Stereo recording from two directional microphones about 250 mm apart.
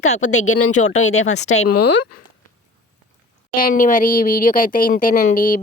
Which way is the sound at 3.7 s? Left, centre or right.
Left.